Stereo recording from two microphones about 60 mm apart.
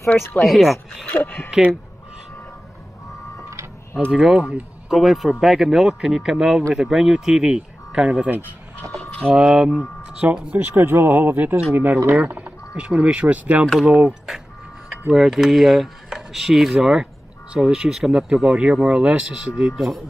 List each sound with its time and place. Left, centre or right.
0.3 s speech: centre
1.1 s speech: left
4.1 s speech: centre
9.3 s speech: centre
10.3 s speech: right
10.6 s speech: right
14.9 s a sound: centre
16.7 s speech: centre